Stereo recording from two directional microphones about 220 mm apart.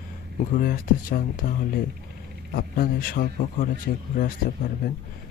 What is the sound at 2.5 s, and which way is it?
Speech, 40° left (ahead or behind).